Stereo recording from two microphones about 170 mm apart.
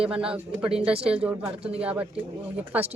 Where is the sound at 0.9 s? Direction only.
35° right (ahead or behind).